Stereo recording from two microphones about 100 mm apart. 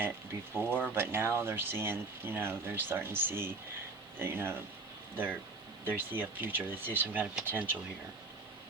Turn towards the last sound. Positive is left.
turn(degrees=-15)  # may be behind; listen again after turning